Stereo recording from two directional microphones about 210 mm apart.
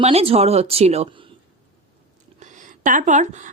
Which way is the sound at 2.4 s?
35° right (ahead or behind).